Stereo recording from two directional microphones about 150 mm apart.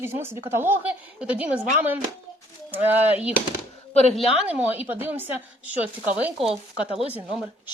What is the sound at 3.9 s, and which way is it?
Speech, 45° left (ahead or behind).